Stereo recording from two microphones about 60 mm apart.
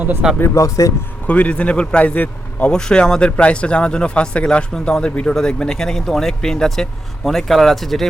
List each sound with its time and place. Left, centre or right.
0.4 s speech: left
1.3 s a man's voice: left
2.6 s speech: centre